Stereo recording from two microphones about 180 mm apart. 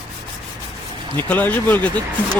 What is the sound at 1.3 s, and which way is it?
Speech, 10° left (ahead or behind).